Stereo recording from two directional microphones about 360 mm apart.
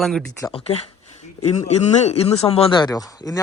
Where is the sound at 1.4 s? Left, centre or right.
Centre.